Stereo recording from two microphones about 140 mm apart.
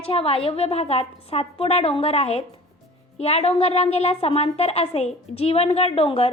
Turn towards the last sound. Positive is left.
turn(degrees=45)  # may be behind; listen again after turning